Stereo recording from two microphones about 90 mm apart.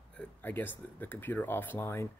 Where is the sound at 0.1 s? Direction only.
10° left (ahead or behind).